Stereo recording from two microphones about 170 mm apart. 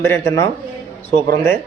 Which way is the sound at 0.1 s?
15° left (ahead or behind).